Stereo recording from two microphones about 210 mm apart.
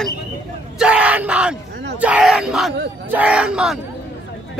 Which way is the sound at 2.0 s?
5° right (ahead or behind).